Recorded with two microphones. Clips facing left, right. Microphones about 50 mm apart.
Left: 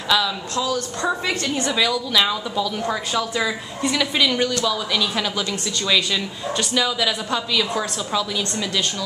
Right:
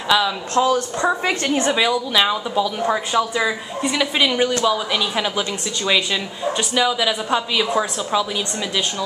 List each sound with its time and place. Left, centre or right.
0.1 s speech: centre
0.6 s a woman's voice: right
1.8 s speech: centre
6.7 s speech: centre